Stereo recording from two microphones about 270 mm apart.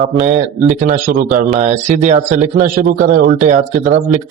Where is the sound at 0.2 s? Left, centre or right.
Right.